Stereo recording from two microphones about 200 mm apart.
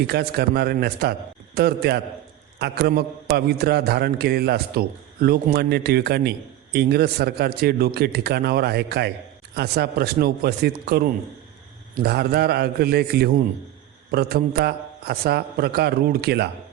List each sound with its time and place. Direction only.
0.1 s a man's voice: 55° right (ahead or behind)